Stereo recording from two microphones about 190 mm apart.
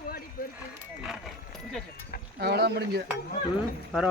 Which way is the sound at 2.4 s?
60° right (ahead or behind).